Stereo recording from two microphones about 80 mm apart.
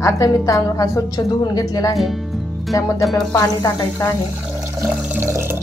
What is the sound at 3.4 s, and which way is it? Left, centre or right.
Speech, left.